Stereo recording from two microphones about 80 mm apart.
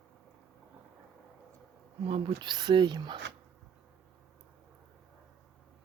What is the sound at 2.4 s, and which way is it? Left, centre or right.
Speech, right.